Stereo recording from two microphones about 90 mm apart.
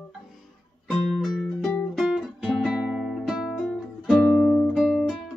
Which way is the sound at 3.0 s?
Centre (ahead or behind).